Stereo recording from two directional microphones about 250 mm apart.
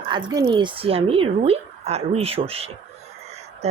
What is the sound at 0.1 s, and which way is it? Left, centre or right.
A woman's voice, centre.